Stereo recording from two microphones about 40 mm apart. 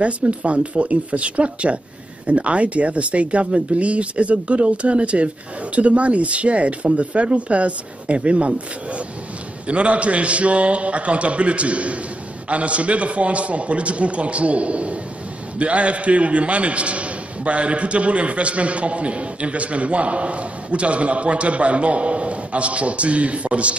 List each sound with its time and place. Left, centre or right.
0.0 s a man's voice: right